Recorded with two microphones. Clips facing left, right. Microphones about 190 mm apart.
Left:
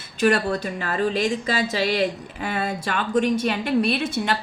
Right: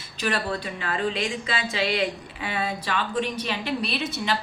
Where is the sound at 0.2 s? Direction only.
50° left (ahead or behind).